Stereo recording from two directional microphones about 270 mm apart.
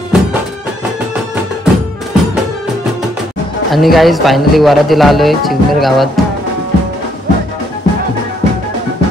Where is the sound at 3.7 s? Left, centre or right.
Centre.